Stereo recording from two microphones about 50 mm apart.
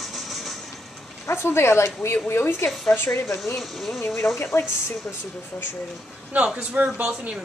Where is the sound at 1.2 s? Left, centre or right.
Left.